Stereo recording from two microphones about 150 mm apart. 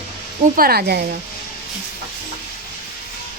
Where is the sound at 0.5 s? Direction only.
85° right.